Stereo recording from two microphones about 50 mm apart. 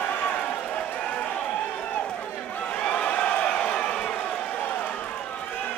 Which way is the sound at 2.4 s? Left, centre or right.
Left.